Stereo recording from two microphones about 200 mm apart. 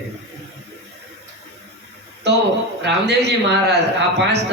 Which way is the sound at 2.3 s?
60° right (ahead or behind).